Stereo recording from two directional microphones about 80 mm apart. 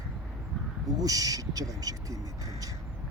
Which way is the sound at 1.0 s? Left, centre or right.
Right.